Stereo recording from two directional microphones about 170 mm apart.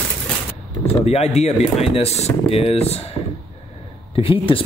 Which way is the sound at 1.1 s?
40° left (ahead or behind).